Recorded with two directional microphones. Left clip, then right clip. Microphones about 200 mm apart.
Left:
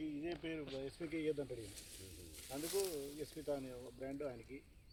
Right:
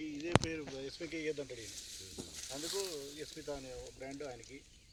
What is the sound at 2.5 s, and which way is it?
Speech, 50° left (ahead or behind).